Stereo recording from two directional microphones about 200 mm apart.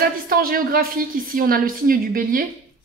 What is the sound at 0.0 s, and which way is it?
A woman's voice, 45° right (ahead or behind).